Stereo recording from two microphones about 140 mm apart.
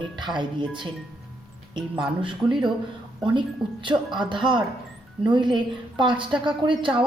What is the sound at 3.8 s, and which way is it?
Speech, 35° right (ahead or behind).